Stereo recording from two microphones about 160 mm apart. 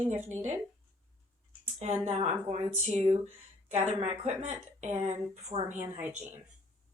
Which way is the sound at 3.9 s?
45° right (ahead or behind).